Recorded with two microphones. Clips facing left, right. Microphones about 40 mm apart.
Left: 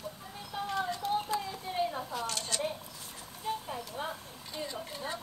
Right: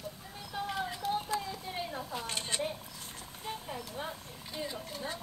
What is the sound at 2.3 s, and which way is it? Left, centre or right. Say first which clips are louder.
Speech: left 1 dB; right.